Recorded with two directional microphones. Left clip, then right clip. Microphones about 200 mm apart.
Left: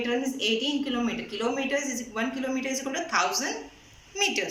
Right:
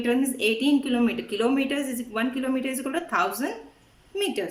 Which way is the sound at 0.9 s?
45° right (ahead or behind).